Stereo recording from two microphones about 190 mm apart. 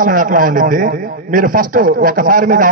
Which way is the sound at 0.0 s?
45° right (ahead or behind).